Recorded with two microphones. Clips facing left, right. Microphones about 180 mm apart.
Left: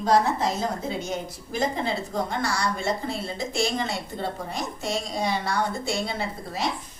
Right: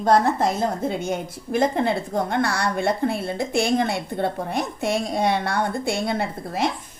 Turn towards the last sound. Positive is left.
turn(degrees=-55)  # may be behind; listen again after turning